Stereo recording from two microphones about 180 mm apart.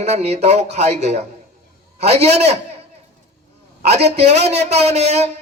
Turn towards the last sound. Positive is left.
turn(degrees=-35)  # may be behind; listen again after turning